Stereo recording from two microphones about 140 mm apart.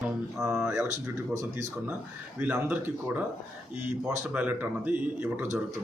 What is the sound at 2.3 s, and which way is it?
Speech, 10° right (ahead or behind).